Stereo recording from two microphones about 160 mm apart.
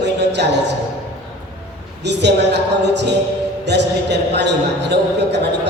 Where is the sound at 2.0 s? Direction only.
90° right.